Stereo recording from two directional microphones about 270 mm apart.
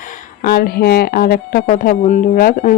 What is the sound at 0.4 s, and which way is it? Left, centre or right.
Speech, left.